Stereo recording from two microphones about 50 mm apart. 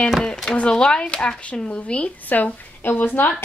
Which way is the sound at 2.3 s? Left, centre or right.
Left.